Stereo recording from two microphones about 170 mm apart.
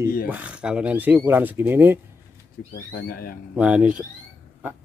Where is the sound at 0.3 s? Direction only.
10° right (ahead or behind).